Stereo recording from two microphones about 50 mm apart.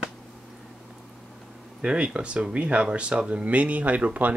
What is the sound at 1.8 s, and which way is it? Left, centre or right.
Speech, centre.